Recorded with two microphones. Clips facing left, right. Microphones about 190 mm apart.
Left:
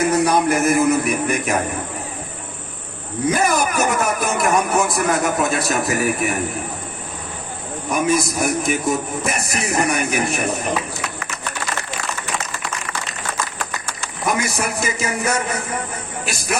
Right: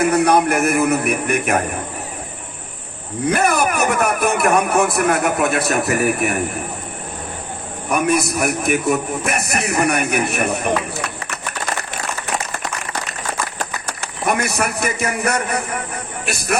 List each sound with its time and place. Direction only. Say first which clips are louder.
0.0 s a man's voice: right 2 dB; 60° right (ahead or behind)
3.2 s a man's voice: right 1 dB; 60° right (ahead or behind)
7.9 s a man's voice: right 1 dB; 60° right (ahead or behind)
14.3 s a man's voice: right 2 dB; 60° right (ahead or behind)